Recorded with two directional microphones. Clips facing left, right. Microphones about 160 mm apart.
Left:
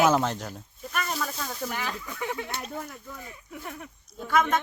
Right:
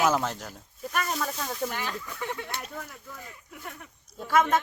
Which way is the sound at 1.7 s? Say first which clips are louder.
Left 1 dB; 10° left (ahead or behind).